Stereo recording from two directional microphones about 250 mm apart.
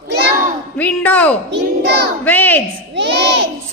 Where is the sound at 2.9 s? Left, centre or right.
Right.